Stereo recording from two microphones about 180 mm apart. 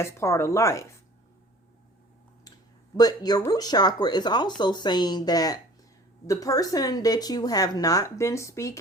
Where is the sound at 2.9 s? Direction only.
20° left (ahead or behind).